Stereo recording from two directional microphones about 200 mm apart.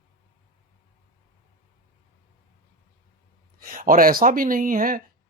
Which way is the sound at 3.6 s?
45° right (ahead or behind).